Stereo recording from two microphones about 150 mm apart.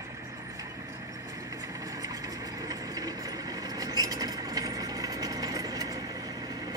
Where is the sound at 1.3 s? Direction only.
20° right (ahead or behind).